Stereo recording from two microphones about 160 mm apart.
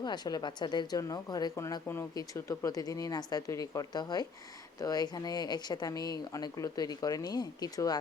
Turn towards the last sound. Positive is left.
turn(degrees=25)  # may be behind; listen again after turning